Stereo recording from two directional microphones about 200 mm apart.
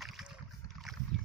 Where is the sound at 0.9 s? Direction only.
Centre (ahead or behind).